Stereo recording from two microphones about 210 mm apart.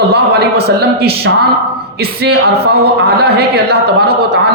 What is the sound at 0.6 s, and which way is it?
Speech, 50° right (ahead or behind).